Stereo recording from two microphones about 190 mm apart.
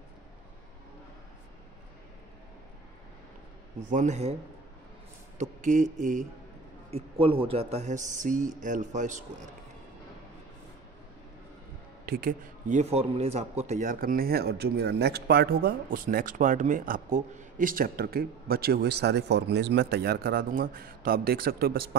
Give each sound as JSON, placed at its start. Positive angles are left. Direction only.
{"t": 3.9, "sound": "speech", "side_deg": -40}
{"t": 5.4, "sound": "speech", "side_deg": -40}
{"t": 7.2, "sound": "speech", "side_deg": -30}
{"t": 12.1, "sound": "speech", "side_deg": -50}